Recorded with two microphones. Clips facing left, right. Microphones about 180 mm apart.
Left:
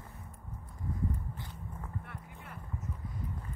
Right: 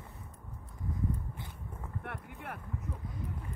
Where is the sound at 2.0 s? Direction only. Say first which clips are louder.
Right 5 dB; 65° right (ahead or behind).